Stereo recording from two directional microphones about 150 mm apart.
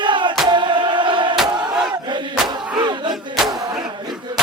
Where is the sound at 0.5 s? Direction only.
30° right (ahead or behind).